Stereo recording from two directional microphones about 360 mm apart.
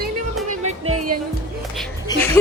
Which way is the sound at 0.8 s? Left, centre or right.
Right.